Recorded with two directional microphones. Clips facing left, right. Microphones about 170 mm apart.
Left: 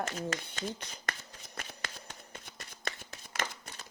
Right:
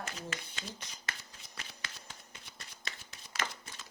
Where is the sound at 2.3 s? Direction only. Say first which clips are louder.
Left 5 dB; 55° left (ahead or behind).